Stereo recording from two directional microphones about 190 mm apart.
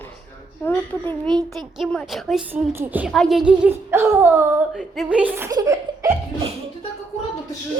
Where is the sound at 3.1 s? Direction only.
Centre (ahead or behind); by 6.1 s 15° right (ahead or behind).